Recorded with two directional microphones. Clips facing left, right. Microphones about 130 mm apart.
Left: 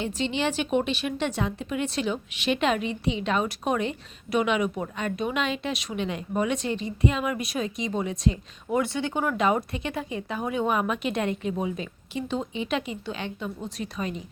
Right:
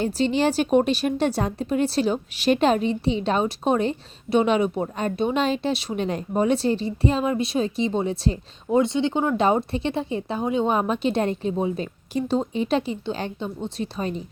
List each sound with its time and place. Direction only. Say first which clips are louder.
0.0 s speech: right 6 dB; 40° right (ahead or behind)